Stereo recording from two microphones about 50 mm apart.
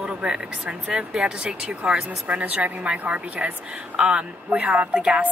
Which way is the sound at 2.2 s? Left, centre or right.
Right.